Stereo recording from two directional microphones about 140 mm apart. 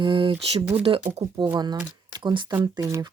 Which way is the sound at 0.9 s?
35° right (ahead or behind).